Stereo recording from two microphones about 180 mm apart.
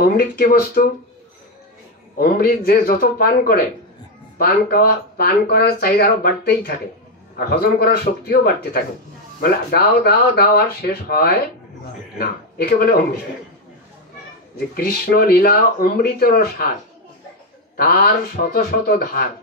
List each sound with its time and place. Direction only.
0.0 s speech: 55° left (ahead or behind)
2.1 s speech: 60° left (ahead or behind)
14.8 s speech: 60° left (ahead or behind)
17.7 s speech: 60° left (ahead or behind)